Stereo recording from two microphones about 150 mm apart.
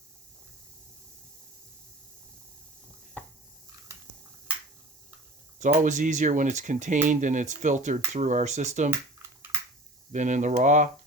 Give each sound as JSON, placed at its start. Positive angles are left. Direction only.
{"t": 5.5, "sound": "speech", "side_deg": -55}
{"t": 10.1, "sound": "speech", "side_deg": -55}